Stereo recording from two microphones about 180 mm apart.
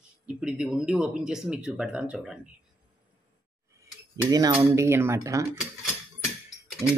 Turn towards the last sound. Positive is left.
turn(degrees=-20)  # may be behind; listen again after turning